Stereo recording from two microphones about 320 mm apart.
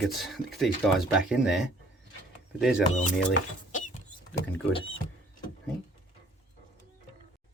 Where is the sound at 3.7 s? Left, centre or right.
Left.